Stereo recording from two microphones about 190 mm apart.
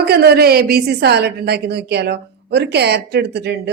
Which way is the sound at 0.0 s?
55° right (ahead or behind).